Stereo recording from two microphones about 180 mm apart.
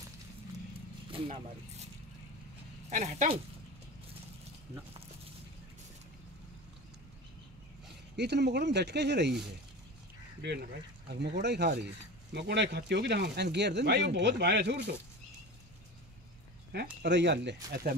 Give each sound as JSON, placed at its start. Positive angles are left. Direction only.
{"t": 2.9, "sound": "speech", "side_deg": -45}
{"t": 8.2, "sound": "speech", "side_deg": -70}
{"t": 10.4, "sound": "speech", "side_deg": -65}
{"t": 17.0, "sound": "speech", "side_deg": -75}